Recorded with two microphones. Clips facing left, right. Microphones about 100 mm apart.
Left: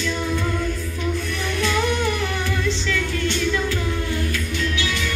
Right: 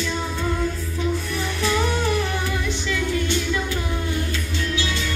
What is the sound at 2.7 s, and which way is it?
Music, 20° right (ahead or behind).